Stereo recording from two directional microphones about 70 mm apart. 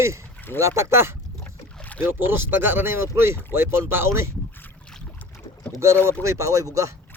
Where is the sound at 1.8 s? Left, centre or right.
Centre.